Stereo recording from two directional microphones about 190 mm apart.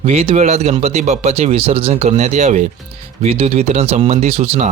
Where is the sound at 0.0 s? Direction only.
35° right (ahead or behind).